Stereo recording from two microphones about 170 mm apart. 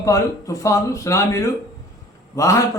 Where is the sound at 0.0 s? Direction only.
20° left (ahead or behind).